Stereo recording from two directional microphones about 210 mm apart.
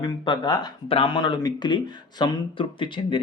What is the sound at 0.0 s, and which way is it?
Speech, 20° left (ahead or behind).